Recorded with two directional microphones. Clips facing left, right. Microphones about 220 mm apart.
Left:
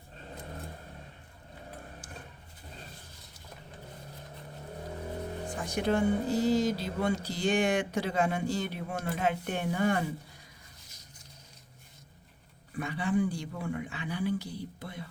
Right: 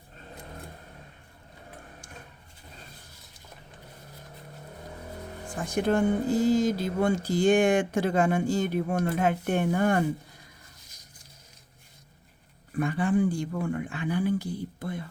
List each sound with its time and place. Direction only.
5.6 s speech: 50° right (ahead or behind)
12.7 s speech: 50° right (ahead or behind)